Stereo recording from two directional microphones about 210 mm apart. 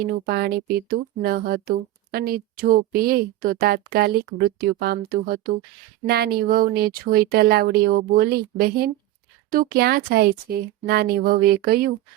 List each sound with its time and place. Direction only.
0.3 s a woman's voice: 50° right (ahead or behind)